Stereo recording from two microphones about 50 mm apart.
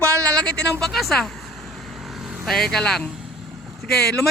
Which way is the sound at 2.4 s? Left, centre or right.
Centre.